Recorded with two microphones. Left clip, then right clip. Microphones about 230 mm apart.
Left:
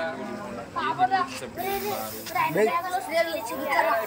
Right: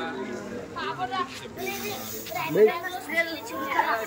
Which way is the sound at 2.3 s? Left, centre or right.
Left.